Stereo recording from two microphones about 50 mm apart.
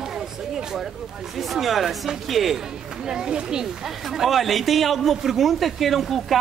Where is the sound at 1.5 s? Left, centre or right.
Centre.